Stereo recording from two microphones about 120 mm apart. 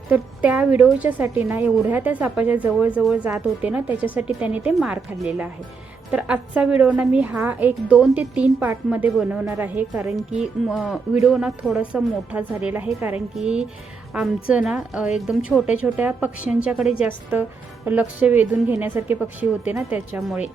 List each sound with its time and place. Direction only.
0.1 s a woman's voice: 10° right (ahead or behind)
10.1 s a woman's voice: 5° right (ahead or behind)